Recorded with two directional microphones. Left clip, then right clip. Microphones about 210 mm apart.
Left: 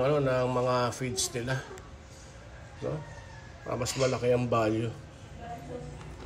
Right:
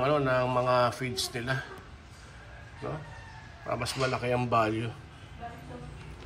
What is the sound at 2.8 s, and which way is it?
A man's voice, 5° left (ahead or behind).